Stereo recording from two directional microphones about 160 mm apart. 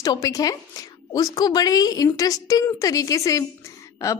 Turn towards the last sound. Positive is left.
turn(degrees=20)  # may be behind; listen again after turning